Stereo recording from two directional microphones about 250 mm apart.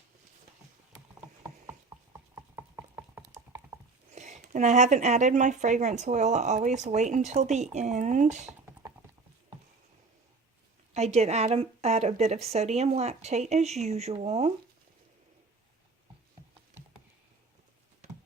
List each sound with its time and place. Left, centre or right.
2.1 s a sound: centre
4.1 s speech: right
10.9 s speech: right